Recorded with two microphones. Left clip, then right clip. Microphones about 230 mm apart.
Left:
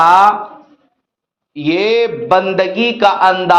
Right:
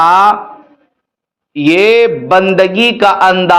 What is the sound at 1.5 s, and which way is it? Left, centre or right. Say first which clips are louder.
A man's voice: right 6 dB; right.